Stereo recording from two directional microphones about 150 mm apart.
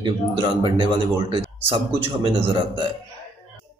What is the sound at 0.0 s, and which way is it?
Speech, 30° right (ahead or behind).